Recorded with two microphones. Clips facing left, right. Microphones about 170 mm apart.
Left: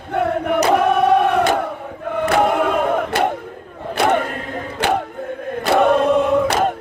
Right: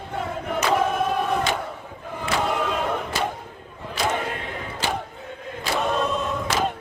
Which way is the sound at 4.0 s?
60° left (ahead or behind).